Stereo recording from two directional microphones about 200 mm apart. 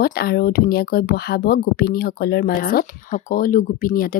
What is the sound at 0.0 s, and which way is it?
Speech, 50° left (ahead or behind).